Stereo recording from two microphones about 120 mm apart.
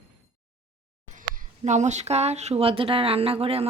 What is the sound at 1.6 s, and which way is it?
Speech, 80° right.